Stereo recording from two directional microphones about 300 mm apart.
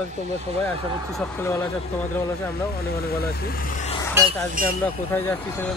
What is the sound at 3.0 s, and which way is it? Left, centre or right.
Speech, left.